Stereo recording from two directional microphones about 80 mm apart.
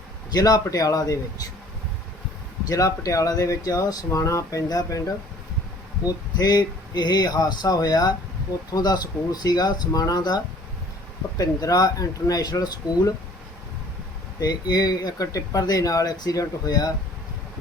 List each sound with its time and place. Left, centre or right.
0.3 s speech: left
2.6 s speech: left
14.3 s speech: left